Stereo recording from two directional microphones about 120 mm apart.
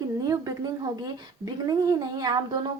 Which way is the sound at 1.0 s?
35° right (ahead or behind).